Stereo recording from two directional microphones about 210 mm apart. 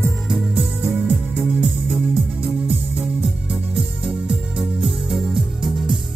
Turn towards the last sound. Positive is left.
turn(degrees=0)  # may be behind; listen again after turning